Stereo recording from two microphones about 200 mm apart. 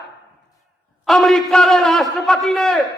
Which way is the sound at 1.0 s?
Centre (ahead or behind).